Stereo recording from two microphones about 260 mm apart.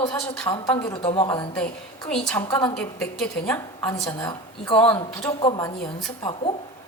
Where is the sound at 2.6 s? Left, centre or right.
Centre.